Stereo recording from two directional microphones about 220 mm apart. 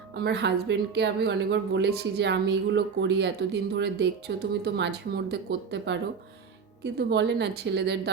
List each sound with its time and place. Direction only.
0.1 s a woman's voice: 50° right (ahead or behind)